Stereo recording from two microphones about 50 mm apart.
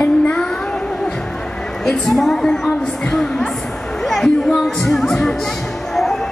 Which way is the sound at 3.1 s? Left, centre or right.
Centre.